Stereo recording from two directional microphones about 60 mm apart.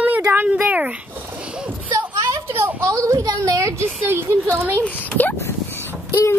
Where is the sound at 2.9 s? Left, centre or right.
Right.